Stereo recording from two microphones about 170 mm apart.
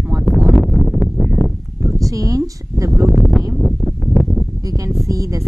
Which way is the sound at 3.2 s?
5° left (ahead or behind).